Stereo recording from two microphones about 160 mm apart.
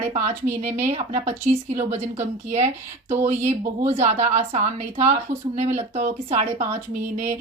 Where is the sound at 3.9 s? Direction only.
45° right (ahead or behind).